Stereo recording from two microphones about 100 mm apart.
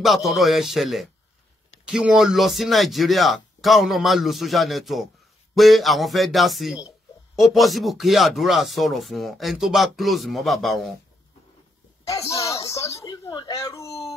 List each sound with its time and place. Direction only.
0.0 s speech: centre (ahead or behind)
12.4 s a sound: 30° left (ahead or behind)
13.5 s speech: 30° left (ahead or behind)